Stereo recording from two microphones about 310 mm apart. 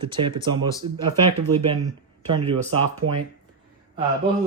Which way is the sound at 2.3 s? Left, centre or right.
Centre.